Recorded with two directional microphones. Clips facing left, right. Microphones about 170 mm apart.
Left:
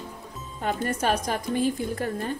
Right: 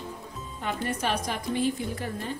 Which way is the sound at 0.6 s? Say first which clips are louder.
Left 4 dB; 45° left (ahead or behind).